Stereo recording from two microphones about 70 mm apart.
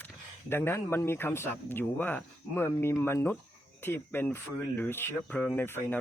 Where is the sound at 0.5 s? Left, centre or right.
Left.